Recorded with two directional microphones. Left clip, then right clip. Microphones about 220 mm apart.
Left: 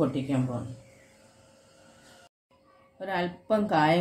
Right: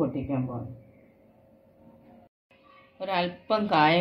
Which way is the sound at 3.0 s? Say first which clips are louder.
Right 3 dB; 35° left (ahead or behind).